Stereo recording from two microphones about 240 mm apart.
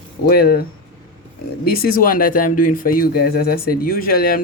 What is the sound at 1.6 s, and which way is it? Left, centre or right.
Speech, left.